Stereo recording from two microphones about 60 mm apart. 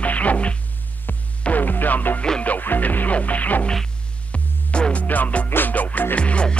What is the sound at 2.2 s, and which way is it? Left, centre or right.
Music, centre.